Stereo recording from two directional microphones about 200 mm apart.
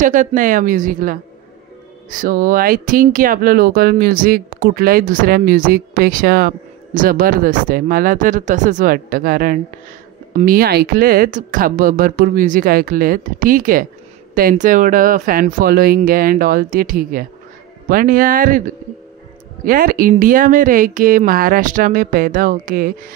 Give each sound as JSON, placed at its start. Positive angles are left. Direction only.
{"t": 0.0, "sound": "speech", "side_deg": -40}
{"t": 19.6, "sound": "speech", "side_deg": -45}